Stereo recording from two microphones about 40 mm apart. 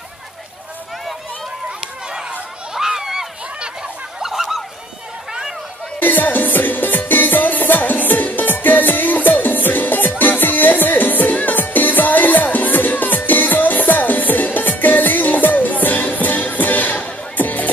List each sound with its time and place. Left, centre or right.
1.8 s a sound: centre
4.2 s fowl: centre
5.9 s music: left